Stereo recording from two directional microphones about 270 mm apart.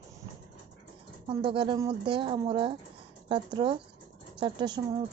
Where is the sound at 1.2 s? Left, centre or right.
Centre.